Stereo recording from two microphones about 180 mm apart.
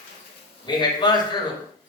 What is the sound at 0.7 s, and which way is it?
Speech, 25° left (ahead or behind).